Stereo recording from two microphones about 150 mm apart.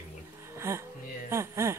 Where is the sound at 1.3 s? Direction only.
20° right (ahead or behind).